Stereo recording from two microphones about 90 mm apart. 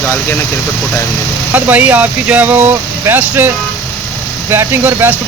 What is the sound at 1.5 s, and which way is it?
Speech, 20° right (ahead or behind).